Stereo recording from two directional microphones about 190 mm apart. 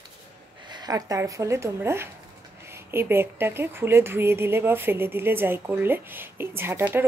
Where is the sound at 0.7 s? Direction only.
20° right (ahead or behind).